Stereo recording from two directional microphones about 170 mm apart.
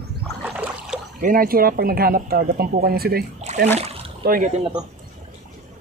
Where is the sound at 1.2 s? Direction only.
55° right (ahead or behind).